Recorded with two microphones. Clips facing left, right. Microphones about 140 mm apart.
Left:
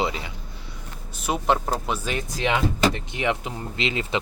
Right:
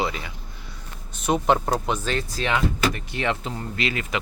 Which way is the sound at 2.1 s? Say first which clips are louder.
Even; 15° left (ahead or behind).